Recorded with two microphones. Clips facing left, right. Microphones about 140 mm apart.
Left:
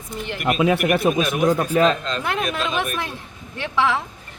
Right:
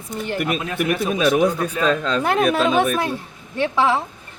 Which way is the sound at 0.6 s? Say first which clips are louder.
Left 4 dB; 85° left.